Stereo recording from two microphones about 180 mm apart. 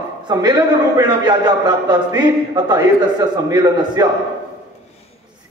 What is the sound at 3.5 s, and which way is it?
Speech, 20° right (ahead or behind).